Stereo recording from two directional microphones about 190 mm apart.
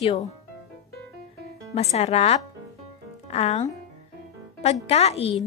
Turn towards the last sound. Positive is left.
turn(degrees=30)  # may be behind; listen again after turning